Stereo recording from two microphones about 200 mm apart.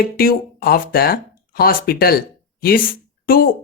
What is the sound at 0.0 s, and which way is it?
Speech, 50° left (ahead or behind).